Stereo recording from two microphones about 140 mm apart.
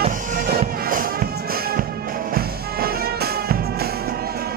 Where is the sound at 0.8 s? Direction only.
90° right.